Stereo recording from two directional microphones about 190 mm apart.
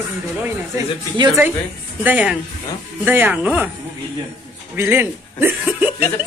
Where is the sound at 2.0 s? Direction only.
5° right (ahead or behind).